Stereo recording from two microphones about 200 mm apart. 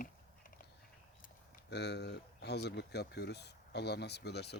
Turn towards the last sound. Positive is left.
turn(degrees=55)  # may be behind; listen again after turning